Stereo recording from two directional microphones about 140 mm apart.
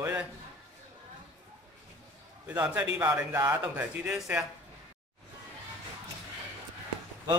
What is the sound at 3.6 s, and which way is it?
Speech, 10° right (ahead or behind).